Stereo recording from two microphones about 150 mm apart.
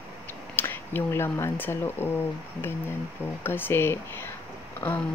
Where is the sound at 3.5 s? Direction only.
15° left (ahead or behind).